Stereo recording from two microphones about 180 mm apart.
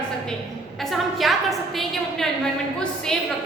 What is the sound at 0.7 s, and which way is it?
A woman's voice, centre (ahead or behind).